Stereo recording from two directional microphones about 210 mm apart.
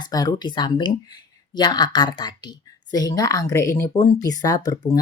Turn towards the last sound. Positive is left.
turn(degrees=15)  # may be behind; listen again after turning